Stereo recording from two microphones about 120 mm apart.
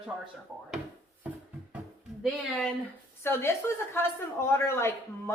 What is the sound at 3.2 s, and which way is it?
Speech, 20° left (ahead or behind).